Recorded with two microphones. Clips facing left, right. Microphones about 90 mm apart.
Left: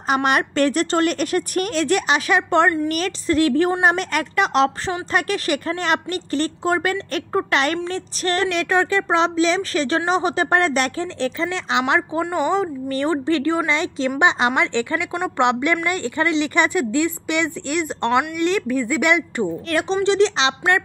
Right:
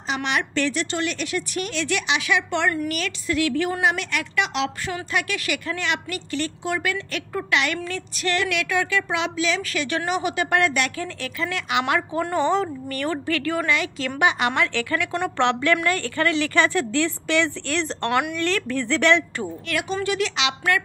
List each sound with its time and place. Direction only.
0.1 s a woman's voice: 45° left (ahead or behind); by 19.5 s 15° left (ahead or behind)
19.7 s a woman's voice: 30° left (ahead or behind)